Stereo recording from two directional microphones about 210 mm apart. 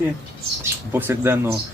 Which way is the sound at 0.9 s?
10° right (ahead or behind).